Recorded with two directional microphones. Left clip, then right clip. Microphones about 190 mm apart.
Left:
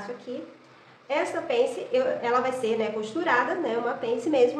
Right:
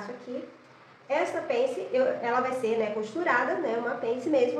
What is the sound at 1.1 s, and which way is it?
A woman's voice, 20° left (ahead or behind).